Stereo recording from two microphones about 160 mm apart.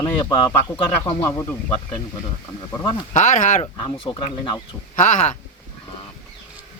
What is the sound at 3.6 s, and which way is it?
Speech, 30° left (ahead or behind).